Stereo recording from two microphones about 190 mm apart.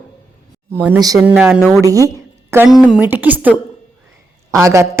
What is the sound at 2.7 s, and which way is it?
A woman's voice, centre (ahead or behind).